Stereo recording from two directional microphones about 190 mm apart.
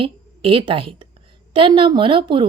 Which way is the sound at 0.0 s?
30° right (ahead or behind).